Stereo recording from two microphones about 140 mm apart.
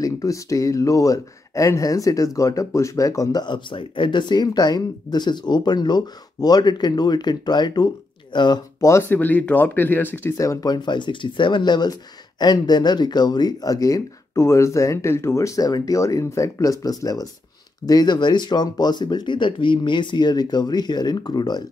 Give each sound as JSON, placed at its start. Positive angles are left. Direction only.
{"t": 0.0, "sound": "speech", "side_deg": 25}
{"t": 8.8, "sound": "speech", "side_deg": 15}